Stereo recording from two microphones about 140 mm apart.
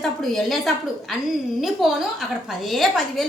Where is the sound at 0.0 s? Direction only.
Centre (ahead or behind).